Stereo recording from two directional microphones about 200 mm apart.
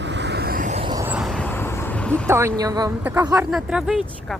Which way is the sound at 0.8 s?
20° right (ahead or behind).